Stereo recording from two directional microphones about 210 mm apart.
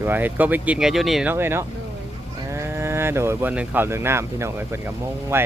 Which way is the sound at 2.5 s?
10° right (ahead or behind).